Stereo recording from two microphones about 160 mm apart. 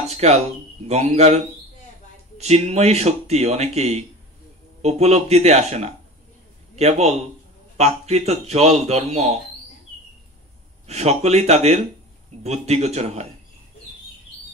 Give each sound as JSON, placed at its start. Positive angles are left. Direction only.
{"t": 0.1, "sound": "a sound", "side_deg": -40}
{"t": 0.8, "sound": "a man's voice", "side_deg": -40}
{"t": 10.9, "sound": "speech", "side_deg": -45}